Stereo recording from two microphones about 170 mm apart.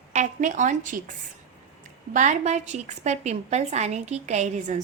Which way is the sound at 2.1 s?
45° right (ahead or behind).